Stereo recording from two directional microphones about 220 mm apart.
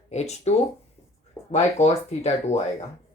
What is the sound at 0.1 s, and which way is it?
Speech, 30° left (ahead or behind).